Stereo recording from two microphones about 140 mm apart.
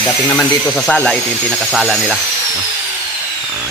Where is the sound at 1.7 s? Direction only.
Centre (ahead or behind).